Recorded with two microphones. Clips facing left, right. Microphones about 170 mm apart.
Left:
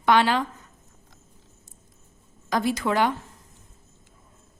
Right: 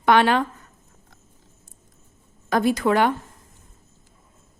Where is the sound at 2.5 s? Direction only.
55° right (ahead or behind).